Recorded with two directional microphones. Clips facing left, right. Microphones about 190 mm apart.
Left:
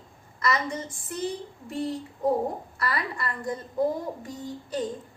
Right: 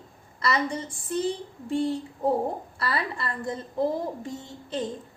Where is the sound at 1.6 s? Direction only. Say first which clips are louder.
Right 5 dB; 30° right (ahead or behind).